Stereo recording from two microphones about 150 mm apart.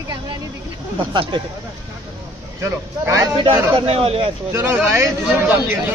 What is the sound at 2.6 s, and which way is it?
Speech, 20° right (ahead or behind).